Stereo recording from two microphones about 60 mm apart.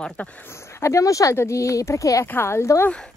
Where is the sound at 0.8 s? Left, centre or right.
Left.